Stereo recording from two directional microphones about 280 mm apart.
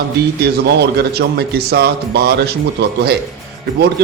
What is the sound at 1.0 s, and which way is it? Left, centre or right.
A man's voice, right.